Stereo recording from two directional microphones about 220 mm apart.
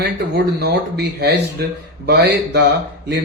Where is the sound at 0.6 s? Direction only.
50° right (ahead or behind).